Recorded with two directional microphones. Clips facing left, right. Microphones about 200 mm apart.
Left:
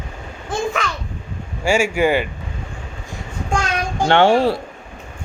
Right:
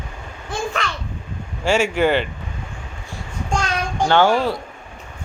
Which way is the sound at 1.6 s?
10° left (ahead or behind).